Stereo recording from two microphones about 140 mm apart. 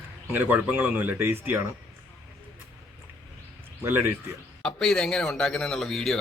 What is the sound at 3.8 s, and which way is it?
Speech, 15° right (ahead or behind).